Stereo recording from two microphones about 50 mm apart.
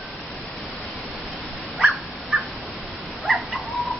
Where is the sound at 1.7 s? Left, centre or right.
Centre.